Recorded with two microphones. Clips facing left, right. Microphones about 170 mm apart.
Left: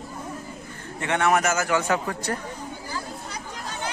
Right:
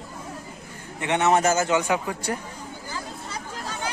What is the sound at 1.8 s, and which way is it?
Speech, 15° right (ahead or behind).